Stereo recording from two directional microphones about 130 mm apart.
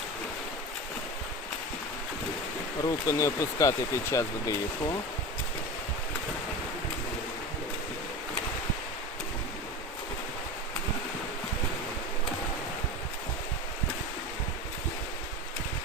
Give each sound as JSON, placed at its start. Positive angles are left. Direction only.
{"t": 2.8, "sound": "speech", "side_deg": 25}